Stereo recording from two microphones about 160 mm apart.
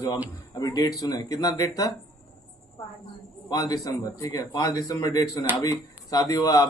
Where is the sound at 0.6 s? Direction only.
25° left (ahead or behind).